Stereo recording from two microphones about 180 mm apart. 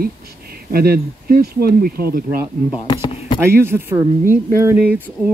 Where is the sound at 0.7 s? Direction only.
55° right (ahead or behind).